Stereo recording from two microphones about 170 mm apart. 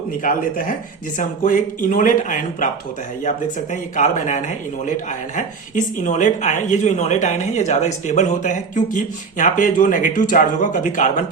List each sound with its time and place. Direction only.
0.2 s speech: 55° left (ahead or behind)